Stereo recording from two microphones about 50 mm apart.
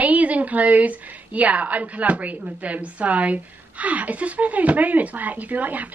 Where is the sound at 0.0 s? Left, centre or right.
Right.